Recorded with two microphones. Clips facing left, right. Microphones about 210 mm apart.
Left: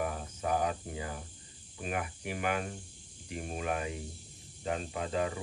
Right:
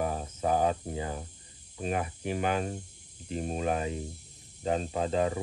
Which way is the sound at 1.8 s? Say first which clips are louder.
Right 5 dB; 30° right (ahead or behind).